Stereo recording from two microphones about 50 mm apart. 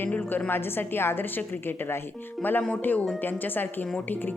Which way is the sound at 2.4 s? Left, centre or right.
Left.